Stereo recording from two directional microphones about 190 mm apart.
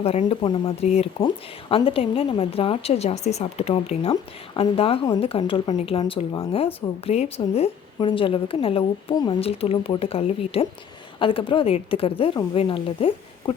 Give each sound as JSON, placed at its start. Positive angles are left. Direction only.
{"t": 0.0, "sound": "a woman's voice", "side_deg": 35}